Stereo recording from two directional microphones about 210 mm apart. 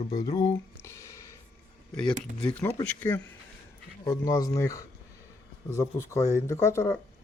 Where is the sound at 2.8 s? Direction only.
10° left (ahead or behind).